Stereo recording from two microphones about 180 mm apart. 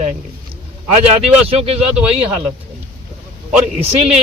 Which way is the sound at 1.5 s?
35° right (ahead or behind).